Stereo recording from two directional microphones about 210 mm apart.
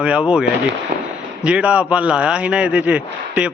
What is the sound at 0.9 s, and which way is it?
Firecracker, 45° right (ahead or behind).